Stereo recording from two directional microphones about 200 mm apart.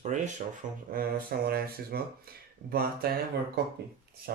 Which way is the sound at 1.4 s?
50° right (ahead or behind).